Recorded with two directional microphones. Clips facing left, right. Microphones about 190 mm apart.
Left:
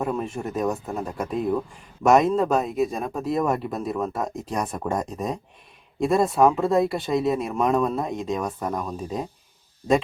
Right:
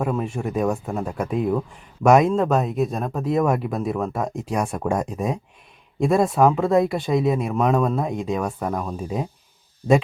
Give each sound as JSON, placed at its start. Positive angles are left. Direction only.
{"t": 0.0, "sound": "speech", "side_deg": 0}